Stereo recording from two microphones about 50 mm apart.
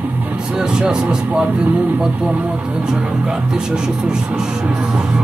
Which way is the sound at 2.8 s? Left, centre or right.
Centre.